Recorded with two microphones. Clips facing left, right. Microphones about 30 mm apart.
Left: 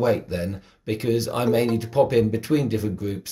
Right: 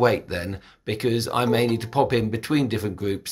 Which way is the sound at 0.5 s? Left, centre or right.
Right.